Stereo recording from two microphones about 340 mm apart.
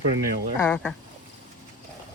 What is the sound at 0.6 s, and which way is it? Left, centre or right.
Speech, centre.